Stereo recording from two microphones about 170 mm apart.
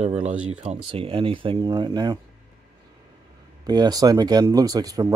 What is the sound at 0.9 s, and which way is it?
Speech, 30° right (ahead or behind).